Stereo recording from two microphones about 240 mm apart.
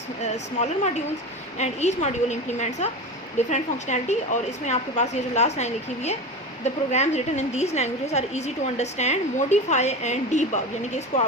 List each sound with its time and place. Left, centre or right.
0.2 s a woman's voice: left